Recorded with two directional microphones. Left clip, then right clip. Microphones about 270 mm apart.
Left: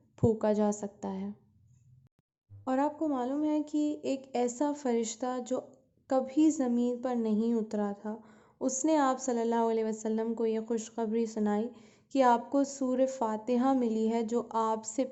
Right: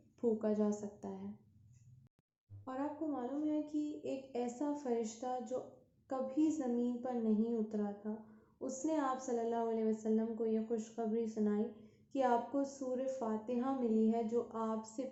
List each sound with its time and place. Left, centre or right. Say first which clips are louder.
0.2 s a woman's voice: left 8 dB; left
2.6 s a woman's voice: left 11 dB; left